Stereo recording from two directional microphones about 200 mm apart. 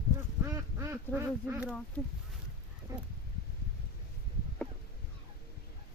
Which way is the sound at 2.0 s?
5° left (ahead or behind).